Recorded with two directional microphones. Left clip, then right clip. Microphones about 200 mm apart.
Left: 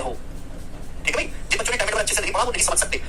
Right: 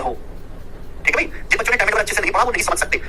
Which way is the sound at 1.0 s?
15° right (ahead or behind).